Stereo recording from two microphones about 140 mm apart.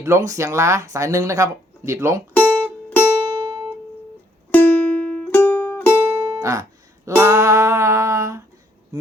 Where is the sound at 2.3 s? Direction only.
10° left (ahead or behind).